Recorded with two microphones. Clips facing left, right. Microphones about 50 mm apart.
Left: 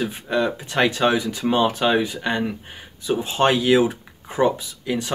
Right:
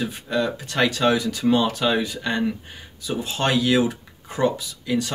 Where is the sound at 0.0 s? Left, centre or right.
Centre.